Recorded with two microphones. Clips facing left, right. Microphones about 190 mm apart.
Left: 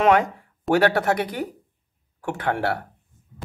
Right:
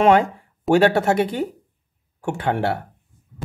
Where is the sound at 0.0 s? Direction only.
30° right (ahead or behind).